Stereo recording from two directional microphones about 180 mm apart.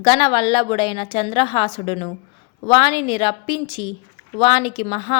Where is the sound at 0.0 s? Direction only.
25° left (ahead or behind).